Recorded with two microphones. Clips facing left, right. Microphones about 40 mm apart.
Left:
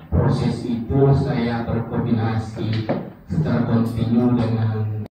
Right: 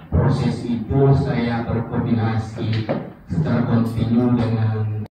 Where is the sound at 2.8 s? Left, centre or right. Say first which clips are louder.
Even; centre.